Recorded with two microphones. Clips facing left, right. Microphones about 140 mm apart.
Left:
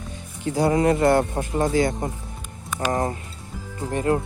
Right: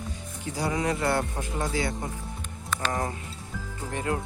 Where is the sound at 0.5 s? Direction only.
50° left (ahead or behind).